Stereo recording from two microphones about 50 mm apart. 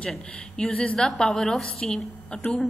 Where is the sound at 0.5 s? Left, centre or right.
Left.